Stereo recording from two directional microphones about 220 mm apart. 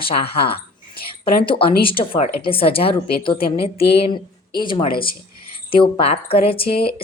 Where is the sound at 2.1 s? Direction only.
25° left (ahead or behind).